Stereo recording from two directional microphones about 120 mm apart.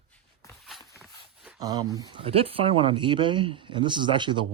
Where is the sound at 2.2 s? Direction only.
55° right (ahead or behind).